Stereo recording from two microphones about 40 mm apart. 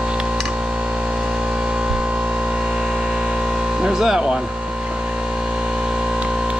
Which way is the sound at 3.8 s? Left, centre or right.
Centre.